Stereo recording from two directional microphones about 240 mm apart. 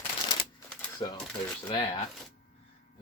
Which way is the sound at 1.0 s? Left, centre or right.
Centre.